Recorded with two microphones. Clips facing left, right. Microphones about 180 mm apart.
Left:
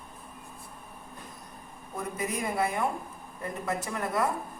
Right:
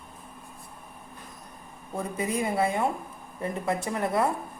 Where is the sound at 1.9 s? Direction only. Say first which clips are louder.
Right 4 dB; 30° right (ahead or behind).